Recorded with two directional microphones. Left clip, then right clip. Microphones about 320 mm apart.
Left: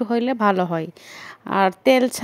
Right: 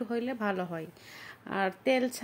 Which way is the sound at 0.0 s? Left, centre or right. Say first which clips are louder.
Left 13 dB; left.